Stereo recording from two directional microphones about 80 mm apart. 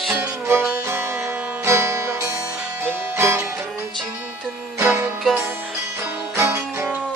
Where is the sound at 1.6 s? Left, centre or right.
Right.